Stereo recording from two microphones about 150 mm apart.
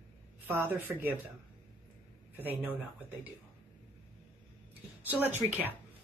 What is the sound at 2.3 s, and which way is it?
Speech, 10° right (ahead or behind).